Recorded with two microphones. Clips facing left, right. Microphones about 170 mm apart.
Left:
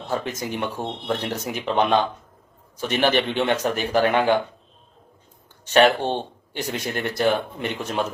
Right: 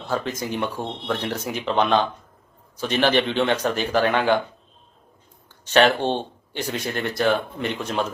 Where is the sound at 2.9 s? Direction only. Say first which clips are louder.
Right 1 dB; 15° left (ahead or behind).